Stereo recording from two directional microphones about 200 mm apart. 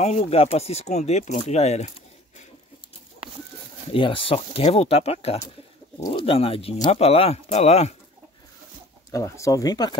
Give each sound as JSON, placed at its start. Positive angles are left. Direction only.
{"t": 0.0, "sound": "speech", "side_deg": 30}
{"t": 3.9, "sound": "speech", "side_deg": 25}
{"t": 9.1, "sound": "speech", "side_deg": 15}